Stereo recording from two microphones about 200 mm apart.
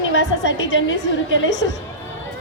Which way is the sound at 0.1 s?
70° left (ahead or behind).